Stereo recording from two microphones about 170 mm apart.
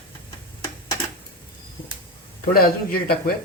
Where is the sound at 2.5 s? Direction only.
60° left (ahead or behind).